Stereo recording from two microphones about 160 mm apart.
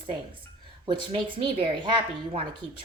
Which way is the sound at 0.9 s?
30° right (ahead or behind).